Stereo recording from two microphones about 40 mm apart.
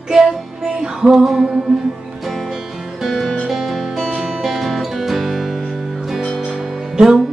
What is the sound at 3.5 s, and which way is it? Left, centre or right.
Music, centre.